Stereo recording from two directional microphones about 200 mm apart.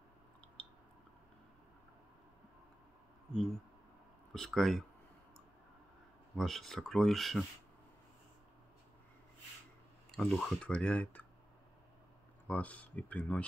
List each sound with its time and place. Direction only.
4.3 s speech: centre (ahead or behind)
6.3 s speech: centre (ahead or behind)
10.1 s speech: 5° left (ahead or behind)
12.4 s speech: 5° left (ahead or behind)